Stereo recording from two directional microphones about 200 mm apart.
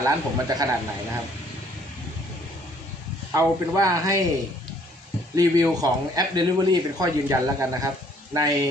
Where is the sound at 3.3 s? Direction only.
15° right (ahead or behind).